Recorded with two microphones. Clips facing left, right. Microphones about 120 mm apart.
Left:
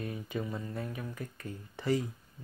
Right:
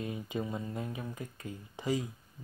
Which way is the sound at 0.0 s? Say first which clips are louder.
Right 1 dB; 20° right (ahead or behind).